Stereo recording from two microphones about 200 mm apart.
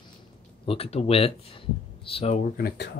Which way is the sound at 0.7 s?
30° left (ahead or behind).